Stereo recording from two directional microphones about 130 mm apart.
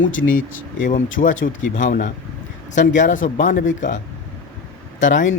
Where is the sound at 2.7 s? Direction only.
80° left.